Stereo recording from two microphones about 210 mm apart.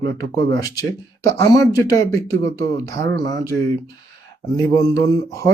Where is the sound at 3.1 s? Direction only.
20° left (ahead or behind).